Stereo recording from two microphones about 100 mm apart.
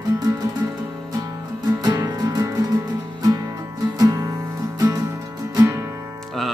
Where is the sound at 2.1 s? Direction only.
40° right (ahead or behind).